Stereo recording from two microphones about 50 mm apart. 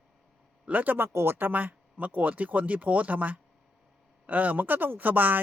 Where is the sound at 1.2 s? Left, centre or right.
Right.